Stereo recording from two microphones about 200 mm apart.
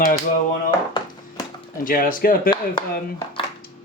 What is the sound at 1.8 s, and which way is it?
Speech, 45° left (ahead or behind).